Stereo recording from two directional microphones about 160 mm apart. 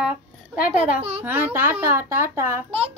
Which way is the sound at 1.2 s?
10° right (ahead or behind).